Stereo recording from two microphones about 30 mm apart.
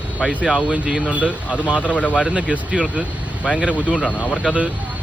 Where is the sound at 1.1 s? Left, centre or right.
Right.